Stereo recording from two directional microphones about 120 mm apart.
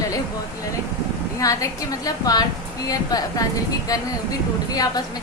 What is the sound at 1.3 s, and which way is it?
A woman's voice, 25° left (ahead or behind).